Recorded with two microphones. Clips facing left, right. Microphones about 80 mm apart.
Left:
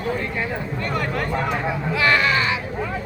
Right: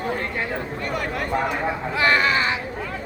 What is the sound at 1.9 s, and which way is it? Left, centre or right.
Speech, right.